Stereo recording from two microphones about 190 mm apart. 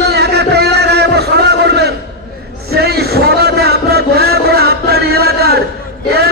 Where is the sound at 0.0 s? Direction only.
60° right (ahead or behind).